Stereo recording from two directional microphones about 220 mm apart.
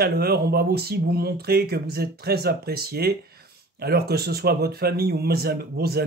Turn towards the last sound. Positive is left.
turn(degrees=-45)  # may be behind; listen again after turning